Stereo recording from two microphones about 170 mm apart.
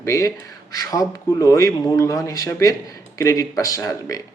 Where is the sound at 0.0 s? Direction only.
20° left (ahead or behind).